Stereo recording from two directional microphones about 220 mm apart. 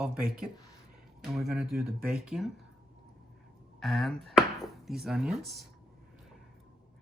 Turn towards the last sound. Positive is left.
turn(degrees=0)  # may be behind; listen again after turning